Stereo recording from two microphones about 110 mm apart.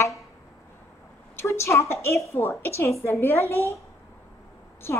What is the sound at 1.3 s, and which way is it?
A woman's voice, 25° left (ahead or behind).